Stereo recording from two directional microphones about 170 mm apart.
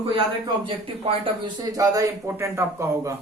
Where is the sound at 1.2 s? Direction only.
20° right (ahead or behind).